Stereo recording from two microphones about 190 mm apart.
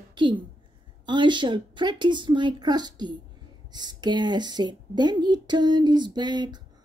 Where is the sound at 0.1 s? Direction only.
25° right (ahead or behind).